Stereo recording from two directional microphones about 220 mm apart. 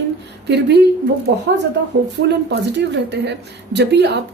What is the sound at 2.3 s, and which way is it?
Speech, 50° right (ahead or behind).